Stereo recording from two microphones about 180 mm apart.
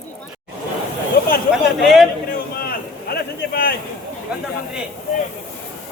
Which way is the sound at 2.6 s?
55° left (ahead or behind).